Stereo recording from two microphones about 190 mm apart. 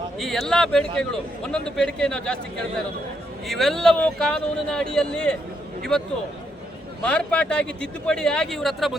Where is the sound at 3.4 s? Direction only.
Centre (ahead or behind).